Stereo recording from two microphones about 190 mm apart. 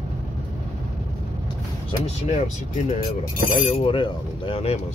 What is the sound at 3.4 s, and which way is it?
Speech, 40° left (ahead or behind).